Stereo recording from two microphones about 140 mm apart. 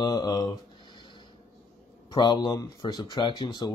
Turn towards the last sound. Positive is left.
turn(degrees=30)  # may be behind; listen again after turning